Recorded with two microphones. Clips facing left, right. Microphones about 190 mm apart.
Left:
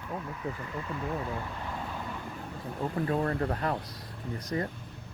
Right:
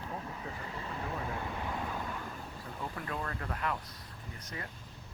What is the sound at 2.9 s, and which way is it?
Speech, 35° left (ahead or behind).